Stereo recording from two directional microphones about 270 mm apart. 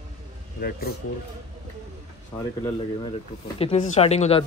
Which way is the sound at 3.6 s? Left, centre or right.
Left.